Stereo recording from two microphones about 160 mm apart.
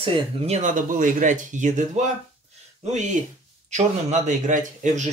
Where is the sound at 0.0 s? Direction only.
35° right (ahead or behind).